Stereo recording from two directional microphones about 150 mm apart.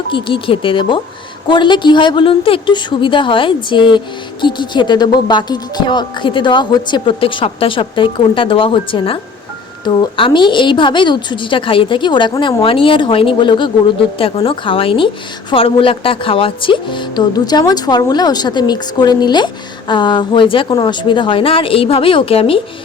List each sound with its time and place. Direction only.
0.1 s a woman's voice: 35° left (ahead or behind)